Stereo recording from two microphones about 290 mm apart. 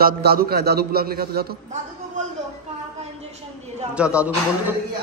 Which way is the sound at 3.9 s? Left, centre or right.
Centre.